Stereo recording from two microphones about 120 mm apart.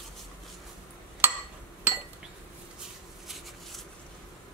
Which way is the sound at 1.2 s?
20° right (ahead or behind).